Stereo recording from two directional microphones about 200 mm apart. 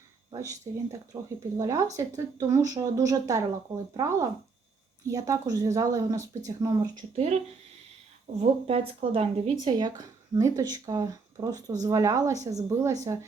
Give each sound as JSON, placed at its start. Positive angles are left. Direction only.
{"t": 0.3, "sound": "speech", "side_deg": -15}
{"t": 8.4, "sound": "speech", "side_deg": -30}